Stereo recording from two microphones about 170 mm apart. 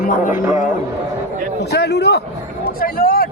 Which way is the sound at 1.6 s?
80° left.